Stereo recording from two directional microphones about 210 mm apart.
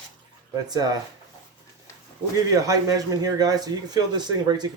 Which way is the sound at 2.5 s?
15° right (ahead or behind).